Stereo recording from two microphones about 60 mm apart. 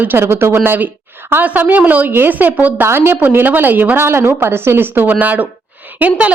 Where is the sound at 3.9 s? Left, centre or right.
Right.